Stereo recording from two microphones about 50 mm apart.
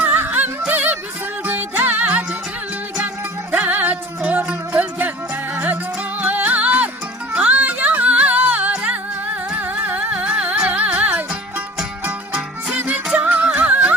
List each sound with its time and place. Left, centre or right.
0.0 s music: right
3.5 s music: right
10.1 s music: right
12.7 s music: right